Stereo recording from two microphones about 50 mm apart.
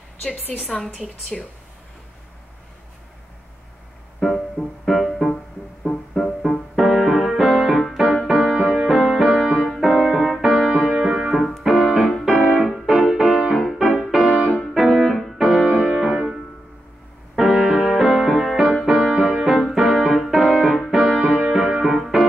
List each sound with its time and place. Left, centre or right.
1.3 s speech: centre
4.2 s music: centre
6.7 s music: centre
11.3 s music: centre
14.3 s music: right
14.6 s music: centre
17.4 s music: centre
20.9 s music: centre